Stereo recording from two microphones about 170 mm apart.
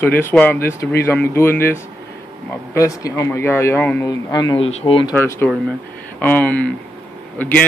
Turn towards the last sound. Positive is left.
turn(degrees=10)  # may be behind; listen again after turning